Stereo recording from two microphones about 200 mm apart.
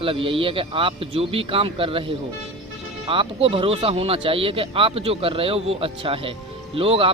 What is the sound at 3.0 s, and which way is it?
Speech, 25° right (ahead or behind).